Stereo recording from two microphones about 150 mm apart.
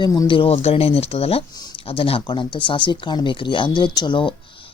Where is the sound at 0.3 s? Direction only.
45° left (ahead or behind).